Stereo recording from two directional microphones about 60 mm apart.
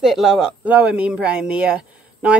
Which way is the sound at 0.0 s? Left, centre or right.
Centre.